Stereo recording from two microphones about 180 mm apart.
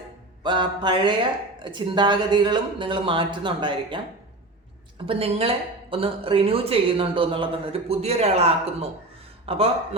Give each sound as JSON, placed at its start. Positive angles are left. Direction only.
{"t": 0.4, "sound": "speech", "side_deg": -25}
{"t": 5.0, "sound": "speech", "side_deg": -30}